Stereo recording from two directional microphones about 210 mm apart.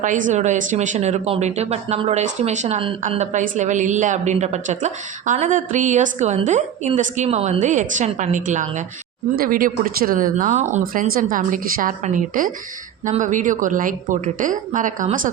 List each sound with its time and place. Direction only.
0.0 s speech: 35° right (ahead or behind)